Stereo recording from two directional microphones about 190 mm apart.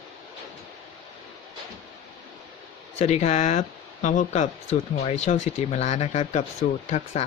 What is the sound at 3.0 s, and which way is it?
Speech, 35° left (ahead or behind).